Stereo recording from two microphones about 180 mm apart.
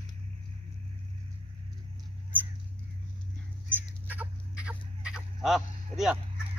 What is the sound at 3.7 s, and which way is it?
Crow, 10° right (ahead or behind).